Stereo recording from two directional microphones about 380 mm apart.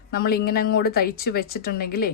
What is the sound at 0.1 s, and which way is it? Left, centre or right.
Speech, left.